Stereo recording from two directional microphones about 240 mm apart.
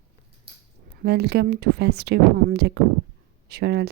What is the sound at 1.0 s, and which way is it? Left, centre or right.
A woman's voice, right.